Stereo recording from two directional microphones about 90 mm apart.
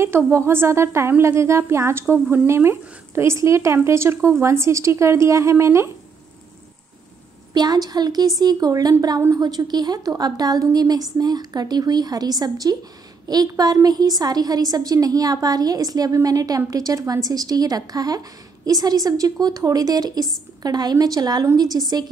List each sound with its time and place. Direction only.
0.0 s a woman's voice: 30° right (ahead or behind)
7.5 s a woman's voice: 50° right (ahead or behind)